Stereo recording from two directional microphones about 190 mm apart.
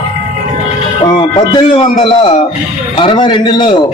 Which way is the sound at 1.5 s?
25° left (ahead or behind).